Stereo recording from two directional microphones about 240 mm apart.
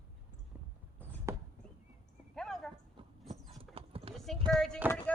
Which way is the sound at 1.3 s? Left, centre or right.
Centre.